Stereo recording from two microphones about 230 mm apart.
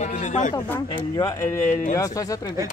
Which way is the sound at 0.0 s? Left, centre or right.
Left.